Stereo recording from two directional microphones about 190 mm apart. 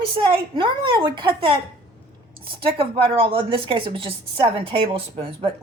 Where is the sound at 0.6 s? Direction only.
25° right (ahead or behind).